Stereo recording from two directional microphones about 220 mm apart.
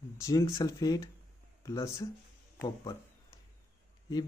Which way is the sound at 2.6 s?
15° left (ahead or behind).